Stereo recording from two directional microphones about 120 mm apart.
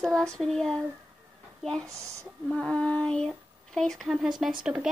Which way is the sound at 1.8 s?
25° right (ahead or behind).